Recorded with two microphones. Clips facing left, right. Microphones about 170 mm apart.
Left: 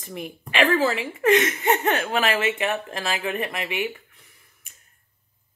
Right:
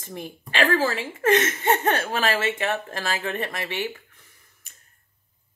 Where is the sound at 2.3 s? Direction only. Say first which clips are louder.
Left 1 dB; 15° left (ahead or behind).